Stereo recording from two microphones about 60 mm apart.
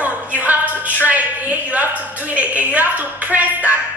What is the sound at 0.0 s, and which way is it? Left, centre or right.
Music, right.